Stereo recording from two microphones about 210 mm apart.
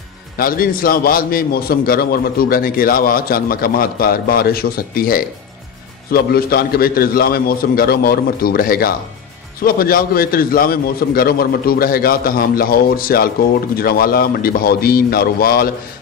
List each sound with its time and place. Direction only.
0.4 s a man's voice: 45° left (ahead or behind)